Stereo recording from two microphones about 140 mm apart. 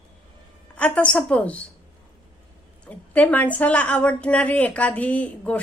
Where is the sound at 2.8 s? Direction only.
10° left (ahead or behind).